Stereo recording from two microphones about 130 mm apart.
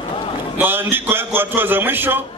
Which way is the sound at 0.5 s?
15° right (ahead or behind).